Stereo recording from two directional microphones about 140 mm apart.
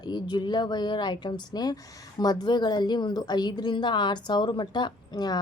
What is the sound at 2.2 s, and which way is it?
A woman's voice, 30° left (ahead or behind).